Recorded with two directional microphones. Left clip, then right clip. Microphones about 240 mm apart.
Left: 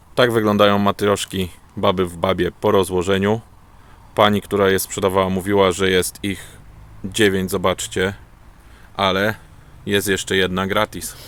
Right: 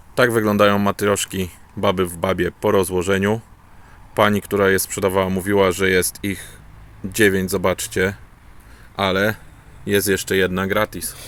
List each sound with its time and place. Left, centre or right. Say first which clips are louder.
0.1 s speech: left 1 dB; centre